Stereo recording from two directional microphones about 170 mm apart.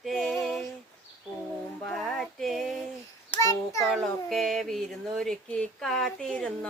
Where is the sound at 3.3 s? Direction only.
20° left (ahead or behind).